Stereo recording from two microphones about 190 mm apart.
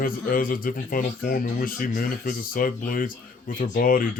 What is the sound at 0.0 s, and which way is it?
Speech, 45° left (ahead or behind).